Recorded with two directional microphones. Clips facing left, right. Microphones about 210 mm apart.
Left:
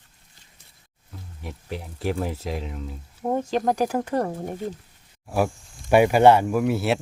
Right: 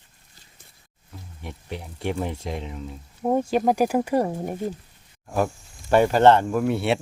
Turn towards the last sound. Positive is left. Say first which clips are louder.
# even
turn(degrees=0)  # may be behind; listen again after turning